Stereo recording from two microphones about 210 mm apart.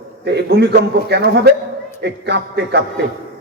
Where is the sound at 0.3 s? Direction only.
55° right (ahead or behind).